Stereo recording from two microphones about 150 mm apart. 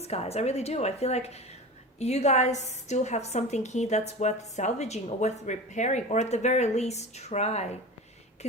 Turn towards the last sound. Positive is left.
turn(degrees=45)  # may be behind; listen again after turning